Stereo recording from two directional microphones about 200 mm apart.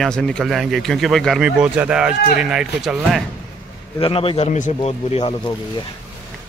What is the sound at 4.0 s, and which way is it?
Speech, 25° left (ahead or behind).